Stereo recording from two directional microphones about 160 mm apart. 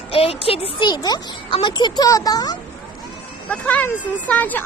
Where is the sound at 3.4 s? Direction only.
10° left (ahead or behind).